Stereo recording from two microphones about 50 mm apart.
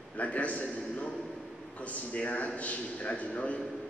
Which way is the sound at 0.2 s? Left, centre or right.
Left.